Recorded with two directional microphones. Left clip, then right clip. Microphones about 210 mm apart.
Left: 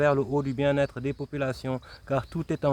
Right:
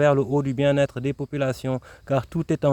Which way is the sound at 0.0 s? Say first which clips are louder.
Right 4 dB; 45° right (ahead or behind).